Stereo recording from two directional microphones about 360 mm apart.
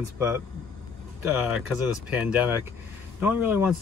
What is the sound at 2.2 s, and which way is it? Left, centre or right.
Speech, centre.